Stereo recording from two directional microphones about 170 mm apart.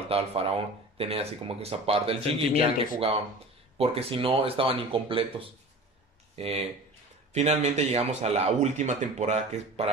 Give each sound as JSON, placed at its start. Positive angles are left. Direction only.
{"t": 0.1, "sound": "speech", "side_deg": -35}
{"t": 6.3, "sound": "speech", "side_deg": -35}